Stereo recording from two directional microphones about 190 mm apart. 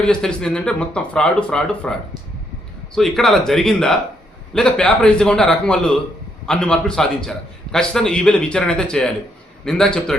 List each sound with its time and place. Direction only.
0.0 s a man's voice: 5° left (ahead or behind)